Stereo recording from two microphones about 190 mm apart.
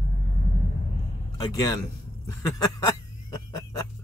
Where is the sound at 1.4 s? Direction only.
20° left (ahead or behind).